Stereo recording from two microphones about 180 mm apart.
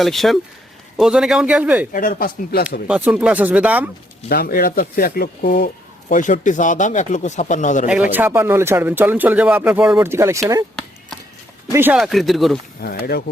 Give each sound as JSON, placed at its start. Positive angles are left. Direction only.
{"t": 0.0, "sound": "a man's voice", "side_deg": 0}
{"t": 1.9, "sound": "speech", "side_deg": 50}
{"t": 2.8, "sound": "speech", "side_deg": -5}
{"t": 4.3, "sound": "speech", "side_deg": 55}
{"t": 8.1, "sound": "speech", "side_deg": -10}
{"t": 11.7, "sound": "a man's voice", "side_deg": -10}
{"t": 12.8, "sound": "speech", "side_deg": 60}